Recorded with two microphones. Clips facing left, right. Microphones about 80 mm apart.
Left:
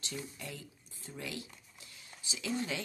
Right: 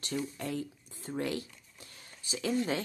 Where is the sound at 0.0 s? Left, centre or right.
Right.